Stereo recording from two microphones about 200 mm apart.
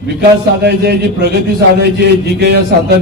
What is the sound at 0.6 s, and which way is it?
A man's voice, 55° right (ahead or behind).